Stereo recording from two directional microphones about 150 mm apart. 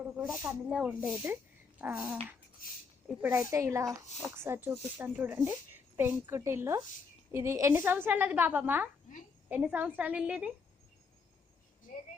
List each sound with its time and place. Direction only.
0.2 s a woman's voice: 10° right (ahead or behind)